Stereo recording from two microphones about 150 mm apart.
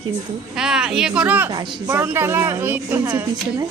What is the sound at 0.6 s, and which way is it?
A woman's voice, 5° right (ahead or behind).